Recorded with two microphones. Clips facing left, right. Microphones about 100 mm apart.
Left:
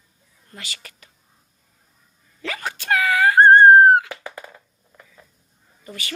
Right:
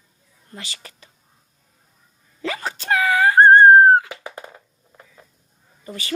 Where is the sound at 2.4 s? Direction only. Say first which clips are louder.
Right 2 dB; 25° right (ahead or behind).